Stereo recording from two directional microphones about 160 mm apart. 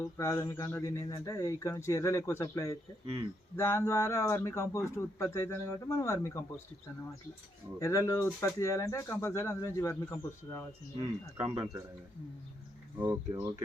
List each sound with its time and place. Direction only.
0.0 s a man's voice: 20° left (ahead or behind)
7.8 s a man's voice: 20° left (ahead or behind)
11.3 s speech: 20° right (ahead or behind)
13.0 s speech: 15° right (ahead or behind)